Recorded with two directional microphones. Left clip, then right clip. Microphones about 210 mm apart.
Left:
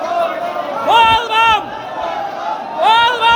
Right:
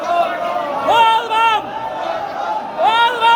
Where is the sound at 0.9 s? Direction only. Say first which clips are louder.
Left 2 dB; 15° left (ahead or behind).